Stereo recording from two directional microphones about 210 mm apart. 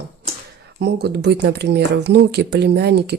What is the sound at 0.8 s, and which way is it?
Speech, 50° right (ahead or behind).